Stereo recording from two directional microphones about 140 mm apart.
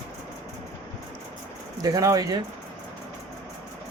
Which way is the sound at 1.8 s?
25° right (ahead or behind).